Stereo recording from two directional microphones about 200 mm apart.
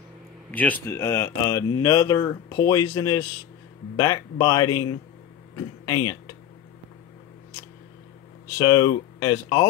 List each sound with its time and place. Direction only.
0.5 s speech: 10° left (ahead or behind)
8.5 s speech: 20° left (ahead or behind)